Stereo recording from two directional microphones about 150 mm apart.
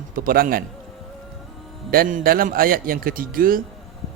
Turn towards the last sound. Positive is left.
turn(degrees=-70)  # may be behind; listen again after turning